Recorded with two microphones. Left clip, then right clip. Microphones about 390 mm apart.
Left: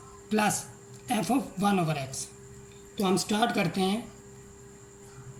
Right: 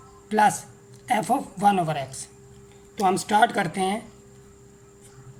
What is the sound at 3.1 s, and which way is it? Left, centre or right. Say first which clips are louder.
Speech: right 6 dB; centre.